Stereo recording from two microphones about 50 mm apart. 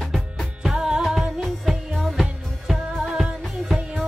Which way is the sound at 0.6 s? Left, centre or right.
Centre.